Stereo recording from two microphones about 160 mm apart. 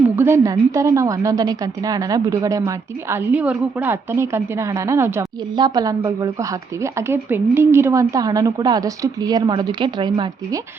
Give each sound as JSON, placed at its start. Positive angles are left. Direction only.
{"t": 0.2, "sound": "a woman's voice", "side_deg": -15}
{"t": 3.3, "sound": "a woman's voice", "side_deg": -10}